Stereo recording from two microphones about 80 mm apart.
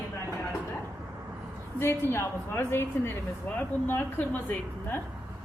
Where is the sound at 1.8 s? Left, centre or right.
Left.